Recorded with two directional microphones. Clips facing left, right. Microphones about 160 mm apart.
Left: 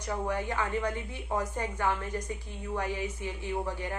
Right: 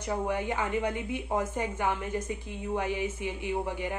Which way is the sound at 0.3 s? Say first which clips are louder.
Even; 20° right (ahead or behind).